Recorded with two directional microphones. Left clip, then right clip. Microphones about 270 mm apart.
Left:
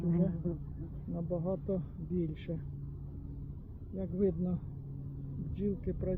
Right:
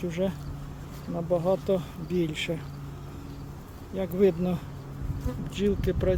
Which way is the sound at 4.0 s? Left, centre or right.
Centre.